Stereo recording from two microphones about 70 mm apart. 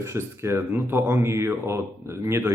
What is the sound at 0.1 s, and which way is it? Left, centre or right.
A man's voice, right.